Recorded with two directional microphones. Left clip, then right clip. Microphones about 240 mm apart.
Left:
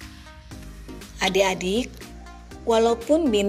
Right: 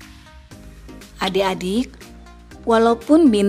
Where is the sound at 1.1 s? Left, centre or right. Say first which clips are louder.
Right 1 dB; centre.